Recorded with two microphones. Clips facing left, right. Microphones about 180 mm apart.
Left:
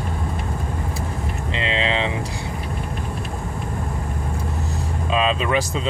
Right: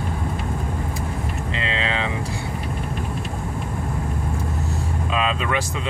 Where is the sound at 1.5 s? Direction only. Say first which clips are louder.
Left 4 dB; 25° left (ahead or behind).